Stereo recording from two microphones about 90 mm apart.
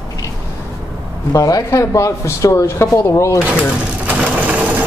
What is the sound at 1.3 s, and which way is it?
Speech, 40° left (ahead or behind).